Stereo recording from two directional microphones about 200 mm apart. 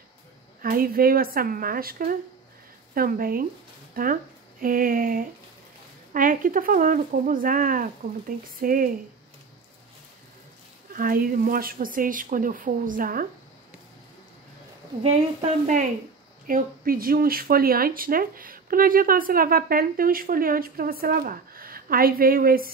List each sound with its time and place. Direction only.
0.6 s speech: 45° right (ahead or behind)
10.9 s speech: 45° right (ahead or behind)
15.0 s a woman's voice: 35° right (ahead or behind)